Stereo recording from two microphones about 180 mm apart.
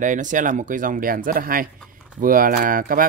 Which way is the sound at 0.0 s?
45° right (ahead or behind).